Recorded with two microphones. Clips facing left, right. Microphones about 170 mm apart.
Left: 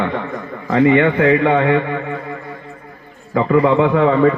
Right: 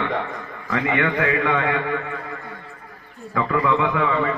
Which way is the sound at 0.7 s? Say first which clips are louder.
Left 9 dB; 30° left (ahead or behind).